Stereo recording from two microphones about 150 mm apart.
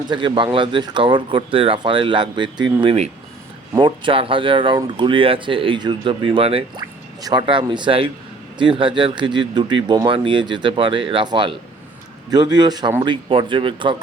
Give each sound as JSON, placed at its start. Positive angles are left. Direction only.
{"t": 0.1, "sound": "speech", "side_deg": -30}
{"t": 2.8, "sound": "speech", "side_deg": -45}
{"t": 7.2, "sound": "a man's voice", "side_deg": -30}